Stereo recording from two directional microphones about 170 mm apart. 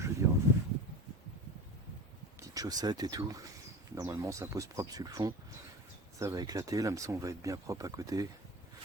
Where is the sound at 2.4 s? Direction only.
20° right (ahead or behind).